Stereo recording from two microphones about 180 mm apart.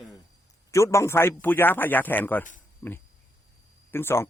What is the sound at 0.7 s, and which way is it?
Speech, 15° left (ahead or behind).